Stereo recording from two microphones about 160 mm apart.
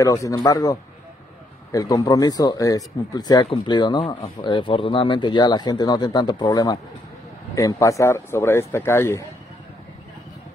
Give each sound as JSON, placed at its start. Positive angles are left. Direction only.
{"t": 0.0, "sound": "speech", "side_deg": 20}